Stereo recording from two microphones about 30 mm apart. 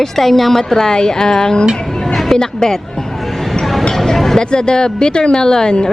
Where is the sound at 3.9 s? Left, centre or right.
Centre.